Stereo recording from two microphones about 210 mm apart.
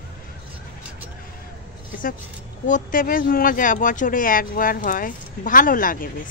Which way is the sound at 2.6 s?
40° left (ahead or behind).